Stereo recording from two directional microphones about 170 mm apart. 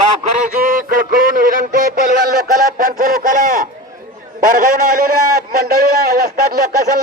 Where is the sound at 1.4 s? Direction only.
50° right (ahead or behind).